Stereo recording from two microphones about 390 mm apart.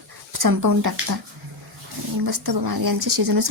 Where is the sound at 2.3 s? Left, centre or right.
Right.